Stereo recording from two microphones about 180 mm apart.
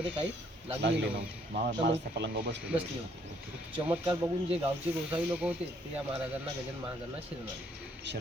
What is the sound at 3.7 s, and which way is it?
Speech, 10° right (ahead or behind).